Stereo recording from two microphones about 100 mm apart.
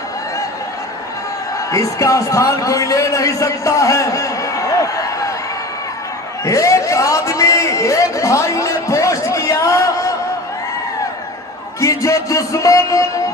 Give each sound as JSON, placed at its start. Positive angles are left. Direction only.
{"t": 1.7, "sound": "a man's voice", "side_deg": 35}
{"t": 6.4, "sound": "a sound", "side_deg": 30}
{"t": 11.8, "sound": "speech", "side_deg": 30}